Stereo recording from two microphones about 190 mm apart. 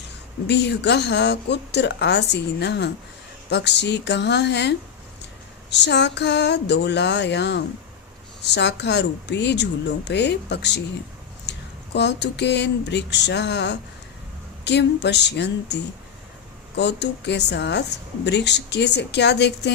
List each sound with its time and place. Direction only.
0.4 s a woman's voice: 65° left (ahead or behind)
5.7 s a woman's voice: 65° left (ahead or behind)
11.5 s a sound: 65° left (ahead or behind)
11.9 s a woman's voice: 65° left (ahead or behind)